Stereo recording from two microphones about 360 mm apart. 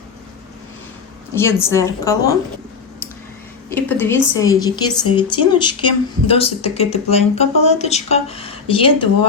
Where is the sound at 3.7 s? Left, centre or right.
Centre.